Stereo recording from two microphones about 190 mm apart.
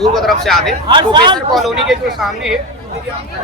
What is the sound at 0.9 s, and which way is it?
Speech, 25° right (ahead or behind).